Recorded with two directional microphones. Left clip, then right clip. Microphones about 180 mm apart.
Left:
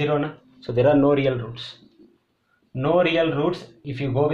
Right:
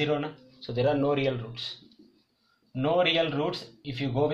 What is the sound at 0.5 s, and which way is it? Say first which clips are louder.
Speech: left 8 dB; 35° left (ahead or behind).